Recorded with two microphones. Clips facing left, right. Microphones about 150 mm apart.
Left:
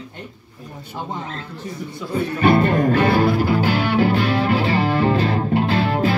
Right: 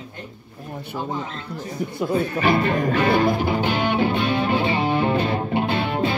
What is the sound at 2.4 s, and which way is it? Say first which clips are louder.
Music: left 7 dB; 45° left (ahead or behind).